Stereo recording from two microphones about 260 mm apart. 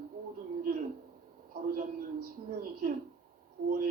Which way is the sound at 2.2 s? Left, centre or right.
Right.